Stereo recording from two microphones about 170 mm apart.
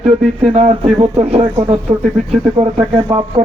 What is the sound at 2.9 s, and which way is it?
Speech, 35° right (ahead or behind).